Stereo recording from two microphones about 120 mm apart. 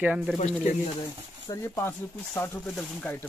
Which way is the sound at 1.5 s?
20° left (ahead or behind).